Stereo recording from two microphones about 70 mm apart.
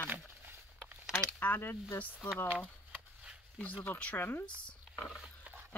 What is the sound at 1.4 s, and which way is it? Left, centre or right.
Speech, left.